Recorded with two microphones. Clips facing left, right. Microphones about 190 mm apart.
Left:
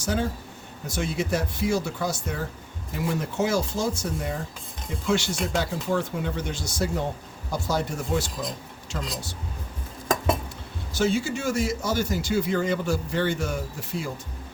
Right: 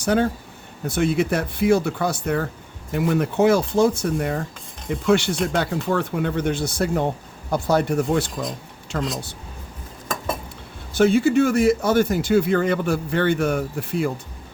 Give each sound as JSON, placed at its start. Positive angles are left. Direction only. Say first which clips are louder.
{"t": 0.0, "sound": "speech", "louder": "right 7 dB", "side_deg": -60}
{"t": 10.9, "sound": "speech", "louder": "right 9 dB", "side_deg": -60}